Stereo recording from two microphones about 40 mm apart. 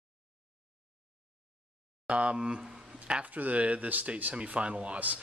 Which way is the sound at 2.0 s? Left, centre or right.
Right.